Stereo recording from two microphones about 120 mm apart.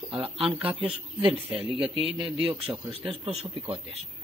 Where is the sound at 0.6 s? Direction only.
10° right (ahead or behind).